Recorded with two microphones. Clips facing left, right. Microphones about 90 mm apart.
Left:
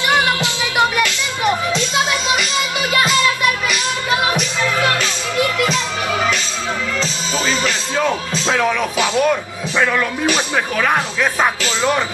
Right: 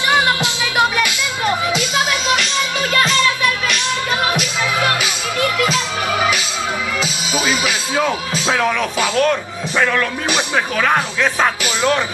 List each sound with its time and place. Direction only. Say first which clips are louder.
0.1 s music: right 1 dB; 20° right (ahead or behind)
2.9 s music: left 1 dB; 15° left (ahead or behind)
3.6 s music: even; centre (ahead or behind)
8.9 s speech: even; 15° left (ahead or behind)
10.5 s speech: right 1 dB; 5° left (ahead or behind)